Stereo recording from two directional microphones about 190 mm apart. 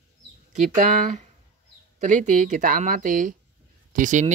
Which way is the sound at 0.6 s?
40° right (ahead or behind).